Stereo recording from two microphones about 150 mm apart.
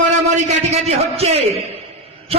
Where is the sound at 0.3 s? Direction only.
45° right (ahead or behind).